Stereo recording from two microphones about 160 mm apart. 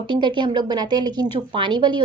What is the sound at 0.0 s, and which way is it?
Speech, 30° right (ahead or behind).